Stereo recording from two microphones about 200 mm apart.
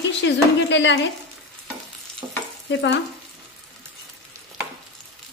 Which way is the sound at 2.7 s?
60° left (ahead or behind).